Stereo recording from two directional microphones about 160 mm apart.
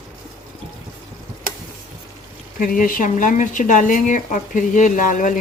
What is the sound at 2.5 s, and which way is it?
Speech, 60° left (ahead or behind).